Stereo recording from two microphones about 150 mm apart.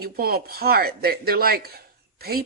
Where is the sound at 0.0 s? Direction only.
90° right.